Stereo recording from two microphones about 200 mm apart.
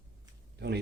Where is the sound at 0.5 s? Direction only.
55° right (ahead or behind).